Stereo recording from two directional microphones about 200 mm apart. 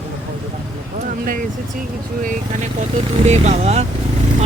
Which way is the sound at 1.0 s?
45° right (ahead or behind).